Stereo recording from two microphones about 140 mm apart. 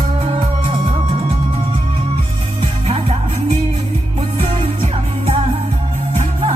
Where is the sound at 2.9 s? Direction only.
45° right (ahead or behind).